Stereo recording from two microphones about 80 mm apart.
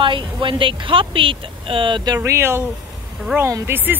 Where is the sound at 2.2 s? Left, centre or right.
Right.